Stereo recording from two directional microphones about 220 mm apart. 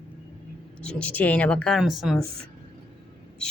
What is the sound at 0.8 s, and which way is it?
Speech, 5° left (ahead or behind).